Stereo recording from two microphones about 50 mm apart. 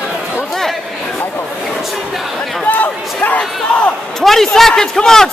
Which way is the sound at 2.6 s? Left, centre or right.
Left.